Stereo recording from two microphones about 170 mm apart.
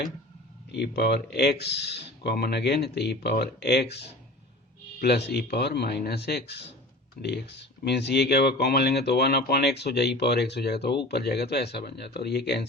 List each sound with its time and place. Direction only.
0.7 s speech: 75° left (ahead or behind)